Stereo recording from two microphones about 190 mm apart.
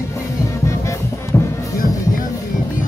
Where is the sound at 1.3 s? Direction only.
15° left (ahead or behind).